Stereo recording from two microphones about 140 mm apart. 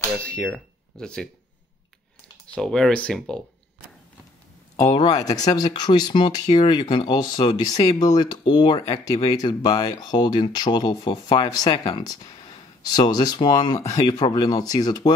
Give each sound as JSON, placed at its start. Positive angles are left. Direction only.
{"t": 0.3, "sound": "speech", "side_deg": 5}
{"t": 2.4, "sound": "speech", "side_deg": 5}
{"t": 4.7, "sound": "speech", "side_deg": 30}
{"t": 9.4, "sound": "speech", "side_deg": 30}